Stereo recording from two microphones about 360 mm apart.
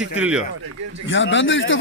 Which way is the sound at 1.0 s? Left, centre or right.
Left.